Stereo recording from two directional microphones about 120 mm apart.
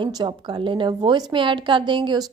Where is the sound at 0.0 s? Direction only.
35° right (ahead or behind).